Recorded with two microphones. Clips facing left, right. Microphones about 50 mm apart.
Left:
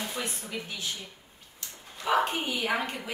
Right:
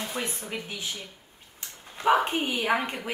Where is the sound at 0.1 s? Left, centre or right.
Right.